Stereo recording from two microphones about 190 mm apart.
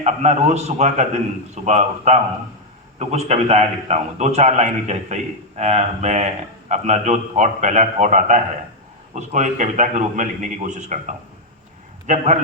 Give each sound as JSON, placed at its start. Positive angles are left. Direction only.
{"t": 0.0, "sound": "a man's voice", "side_deg": -35}
{"t": 12.0, "sound": "a man's voice", "side_deg": -40}